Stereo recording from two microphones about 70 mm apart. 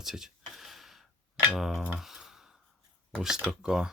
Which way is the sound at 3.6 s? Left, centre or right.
Centre.